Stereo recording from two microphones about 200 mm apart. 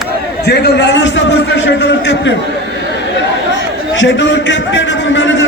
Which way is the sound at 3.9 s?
65° left (ahead or behind).